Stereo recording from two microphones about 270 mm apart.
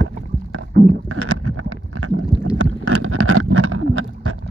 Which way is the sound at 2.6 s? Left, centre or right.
Right.